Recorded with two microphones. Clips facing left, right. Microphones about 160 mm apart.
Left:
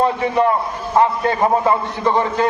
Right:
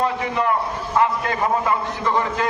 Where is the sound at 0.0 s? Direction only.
30° left (ahead or behind).